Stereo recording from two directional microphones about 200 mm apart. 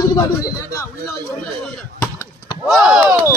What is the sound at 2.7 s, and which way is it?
Speech, centre (ahead or behind).